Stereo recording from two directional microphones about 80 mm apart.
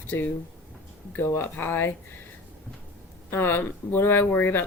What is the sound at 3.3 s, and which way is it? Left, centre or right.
A woman's voice, left.